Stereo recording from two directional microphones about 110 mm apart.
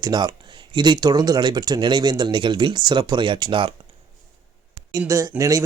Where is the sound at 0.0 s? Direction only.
40° right (ahead or behind).